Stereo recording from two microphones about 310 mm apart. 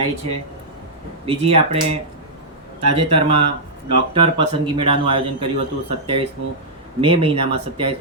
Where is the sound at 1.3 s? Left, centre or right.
Centre.